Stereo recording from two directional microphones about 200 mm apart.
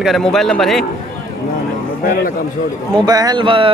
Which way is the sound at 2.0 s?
45° left (ahead or behind).